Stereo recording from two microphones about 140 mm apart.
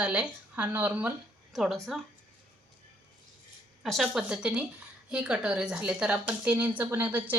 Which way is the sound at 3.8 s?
Centre (ahead or behind).